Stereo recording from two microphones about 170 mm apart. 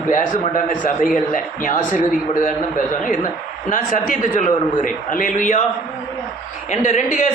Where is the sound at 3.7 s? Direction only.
50° left (ahead or behind).